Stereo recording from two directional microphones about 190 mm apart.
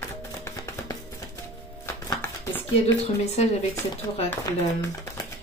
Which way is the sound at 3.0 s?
35° left (ahead or behind).